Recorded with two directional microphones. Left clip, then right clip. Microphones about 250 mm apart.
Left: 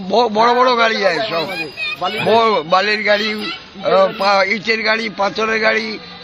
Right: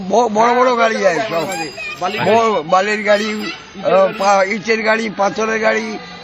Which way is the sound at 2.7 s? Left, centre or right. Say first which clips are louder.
Right 3 dB; centre.